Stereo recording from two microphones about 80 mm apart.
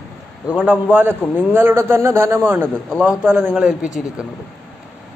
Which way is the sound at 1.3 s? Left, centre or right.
Right.